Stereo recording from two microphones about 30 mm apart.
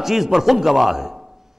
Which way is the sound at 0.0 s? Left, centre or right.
Centre.